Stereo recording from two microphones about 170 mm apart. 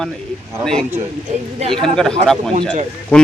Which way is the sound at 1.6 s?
30° right (ahead or behind).